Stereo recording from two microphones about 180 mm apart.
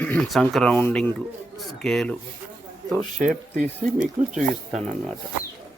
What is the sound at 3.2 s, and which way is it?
Speech, 45° right (ahead or behind).